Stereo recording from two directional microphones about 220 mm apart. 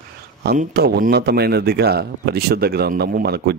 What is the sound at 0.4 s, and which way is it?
A man's voice, 45° right (ahead or behind).